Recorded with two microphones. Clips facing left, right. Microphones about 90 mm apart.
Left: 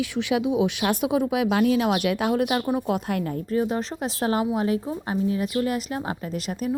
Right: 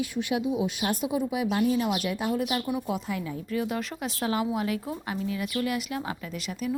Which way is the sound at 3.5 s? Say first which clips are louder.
Left 5 dB; 30° left (ahead or behind).